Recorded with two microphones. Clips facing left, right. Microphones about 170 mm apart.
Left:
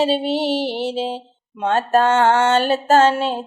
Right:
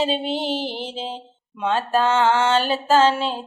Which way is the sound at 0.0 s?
40° left (ahead or behind).